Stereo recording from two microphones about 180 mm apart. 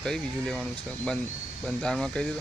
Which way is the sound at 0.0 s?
5° left (ahead or behind).